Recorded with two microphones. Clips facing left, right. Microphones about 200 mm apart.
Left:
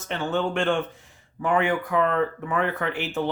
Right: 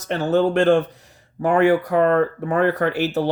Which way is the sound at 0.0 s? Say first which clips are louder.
Right 7 dB; 40° right (ahead or behind).